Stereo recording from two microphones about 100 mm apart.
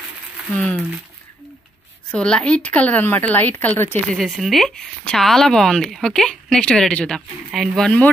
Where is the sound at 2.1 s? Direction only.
10° left (ahead or behind).